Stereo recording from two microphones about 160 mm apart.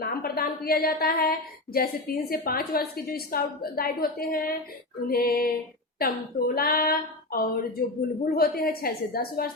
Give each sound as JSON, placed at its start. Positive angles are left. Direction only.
{"t": 0.2, "sound": "speech", "side_deg": 70}